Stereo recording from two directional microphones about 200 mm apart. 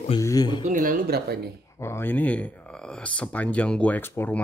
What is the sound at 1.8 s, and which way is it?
Speech, 10° left (ahead or behind).